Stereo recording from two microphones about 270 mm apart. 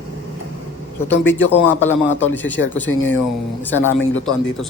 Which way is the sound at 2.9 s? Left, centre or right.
Left.